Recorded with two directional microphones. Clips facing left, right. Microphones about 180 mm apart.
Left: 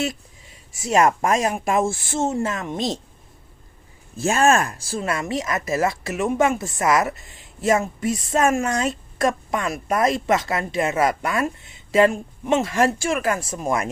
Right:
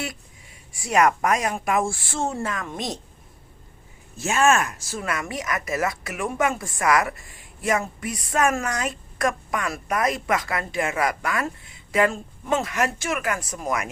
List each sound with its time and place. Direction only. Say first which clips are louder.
0.7 s speech: left 2 dB; 25° left (ahead or behind)
4.2 s speech: left 2 dB; 35° left (ahead or behind)